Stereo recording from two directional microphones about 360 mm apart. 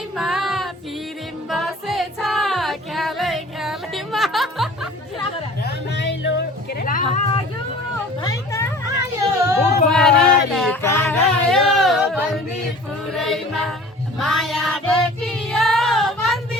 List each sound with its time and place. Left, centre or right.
0.2 s female singing: centre
1.5 s music: centre
5.6 s music: left
8.2 s hubbub: centre
9.5 s female singing: centre
11.4 s a sound: centre
13.1 s music: centre
14.2 s child singing: centre